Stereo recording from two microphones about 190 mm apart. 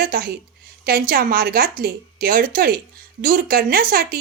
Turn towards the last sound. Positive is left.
turn(degrees=-50)  # may be behind; listen again after turning